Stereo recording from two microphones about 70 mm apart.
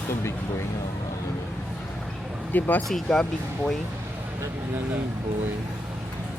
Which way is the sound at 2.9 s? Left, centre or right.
Centre.